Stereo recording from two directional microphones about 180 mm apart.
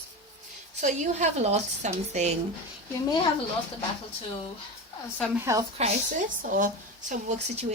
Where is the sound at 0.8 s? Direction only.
40° right (ahead or behind).